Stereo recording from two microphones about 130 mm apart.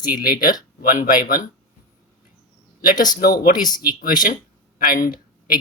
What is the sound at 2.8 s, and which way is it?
Speech, 90° left.